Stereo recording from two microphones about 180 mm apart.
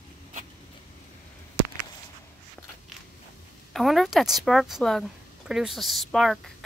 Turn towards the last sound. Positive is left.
turn(degrees=0)  # may be behind; listen again after turning